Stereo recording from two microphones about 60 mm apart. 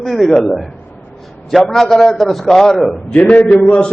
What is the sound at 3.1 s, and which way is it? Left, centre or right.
Speech, left.